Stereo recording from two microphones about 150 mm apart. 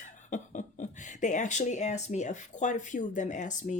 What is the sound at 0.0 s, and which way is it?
Speech, 55° left (ahead or behind).